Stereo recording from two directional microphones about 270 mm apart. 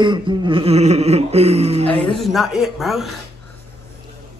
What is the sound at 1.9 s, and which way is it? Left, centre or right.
Speech, centre.